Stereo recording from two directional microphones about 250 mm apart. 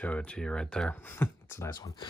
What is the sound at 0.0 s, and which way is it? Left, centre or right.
Speech, centre.